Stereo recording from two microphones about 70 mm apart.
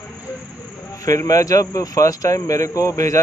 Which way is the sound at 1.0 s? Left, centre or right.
Left.